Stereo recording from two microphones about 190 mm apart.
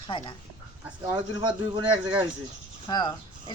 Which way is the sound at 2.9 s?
25° left (ahead or behind).